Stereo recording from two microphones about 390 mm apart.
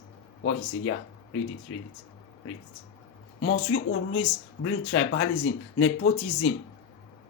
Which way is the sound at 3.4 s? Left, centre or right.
Left.